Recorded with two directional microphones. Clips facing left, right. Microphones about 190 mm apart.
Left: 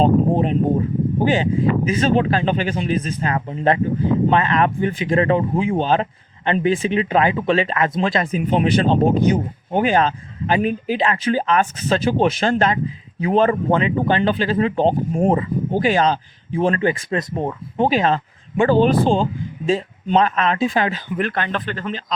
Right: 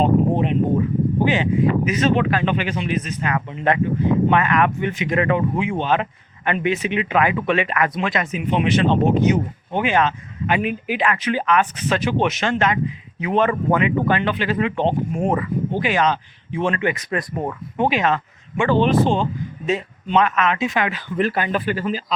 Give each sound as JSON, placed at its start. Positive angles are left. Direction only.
{"t": 0.0, "sound": "speech", "side_deg": 35}
{"t": 21.2, "sound": "speech", "side_deg": -5}